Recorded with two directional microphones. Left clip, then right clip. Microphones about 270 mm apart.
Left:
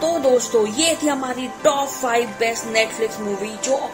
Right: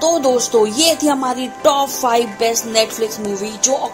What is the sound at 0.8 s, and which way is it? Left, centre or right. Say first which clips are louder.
A man's voice: right 5 dB; right.